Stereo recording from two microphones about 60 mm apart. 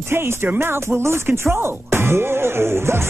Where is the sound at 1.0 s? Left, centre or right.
Right.